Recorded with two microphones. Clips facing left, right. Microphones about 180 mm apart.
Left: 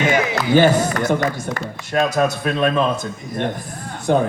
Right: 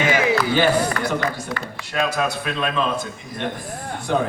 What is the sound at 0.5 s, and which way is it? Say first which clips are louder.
Speech: left 4 dB; 45° left (ahead or behind).